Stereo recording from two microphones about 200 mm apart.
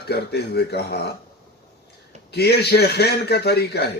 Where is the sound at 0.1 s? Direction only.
55° left (ahead or behind).